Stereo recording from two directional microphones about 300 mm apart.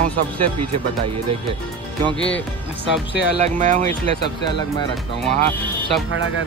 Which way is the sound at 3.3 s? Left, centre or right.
Right.